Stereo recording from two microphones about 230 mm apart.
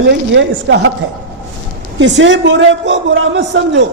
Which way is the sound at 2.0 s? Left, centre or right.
Right.